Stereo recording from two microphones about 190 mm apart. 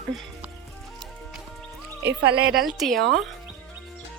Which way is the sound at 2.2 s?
60° right (ahead or behind).